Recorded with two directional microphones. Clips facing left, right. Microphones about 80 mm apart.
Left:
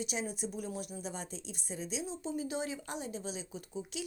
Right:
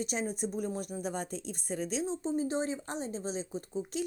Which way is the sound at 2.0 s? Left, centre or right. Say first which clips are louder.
Right 6 dB; right.